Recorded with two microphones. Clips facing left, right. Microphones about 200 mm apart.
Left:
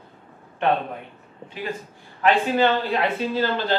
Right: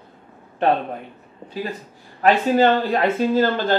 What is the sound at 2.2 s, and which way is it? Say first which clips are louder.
Speech: right 3 dB; 45° right (ahead or behind).